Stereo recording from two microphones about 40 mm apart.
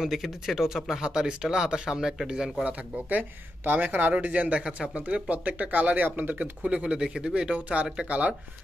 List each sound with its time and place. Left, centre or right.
0.0 s speech: centre
2.6 s speech: right
4.8 s speech: right
6.6 s speech: right